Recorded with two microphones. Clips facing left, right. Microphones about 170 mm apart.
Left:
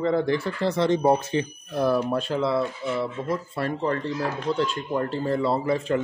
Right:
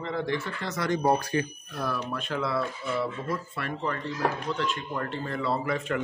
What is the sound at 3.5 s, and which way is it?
A man's voice, 35° left (ahead or behind).